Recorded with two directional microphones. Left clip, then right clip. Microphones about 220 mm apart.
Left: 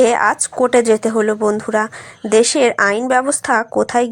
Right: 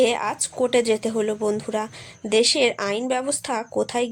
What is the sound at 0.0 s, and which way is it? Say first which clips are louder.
A woman's voice: left 8 dB; 15° left (ahead or behind).